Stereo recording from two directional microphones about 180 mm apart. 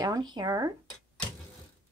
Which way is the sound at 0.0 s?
20° right (ahead or behind).